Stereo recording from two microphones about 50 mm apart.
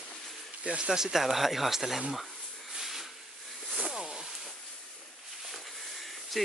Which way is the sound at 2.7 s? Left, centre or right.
Centre.